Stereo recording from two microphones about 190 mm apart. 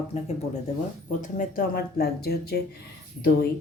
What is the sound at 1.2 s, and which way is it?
Speech, 45° left (ahead or behind).